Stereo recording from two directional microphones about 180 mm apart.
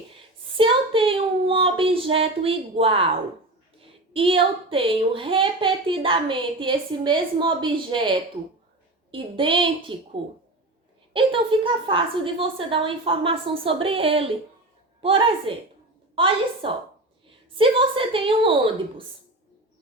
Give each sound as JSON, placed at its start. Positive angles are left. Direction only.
{"t": 0.5, "sound": "a sound", "side_deg": -30}
{"t": 3.8, "sound": "a woman's voice", "side_deg": -30}
{"t": 9.1, "sound": "a woman's voice", "side_deg": -25}